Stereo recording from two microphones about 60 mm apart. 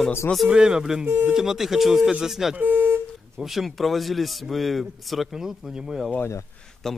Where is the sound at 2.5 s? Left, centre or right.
Right.